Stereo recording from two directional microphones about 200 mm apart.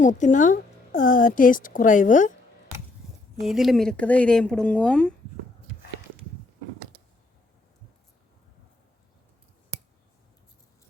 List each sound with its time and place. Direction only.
0.0 s a woman's voice: 40° left (ahead or behind)
3.4 s speech: centre (ahead or behind)